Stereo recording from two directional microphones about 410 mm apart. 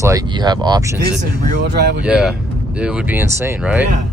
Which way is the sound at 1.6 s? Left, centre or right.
Right.